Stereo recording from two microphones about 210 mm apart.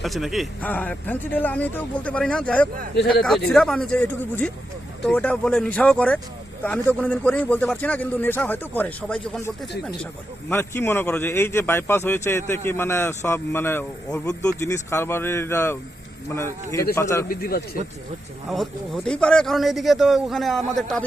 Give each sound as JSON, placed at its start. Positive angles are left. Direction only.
{"t": 0.0, "sound": "a man's voice", "side_deg": 0}
{"t": 10.5, "sound": "a man's voice", "side_deg": 10}
{"t": 16.9, "sound": "a man's voice", "side_deg": 15}
{"t": 17.2, "sound": "speech", "side_deg": 45}
{"t": 18.4, "sound": "a man's voice", "side_deg": 0}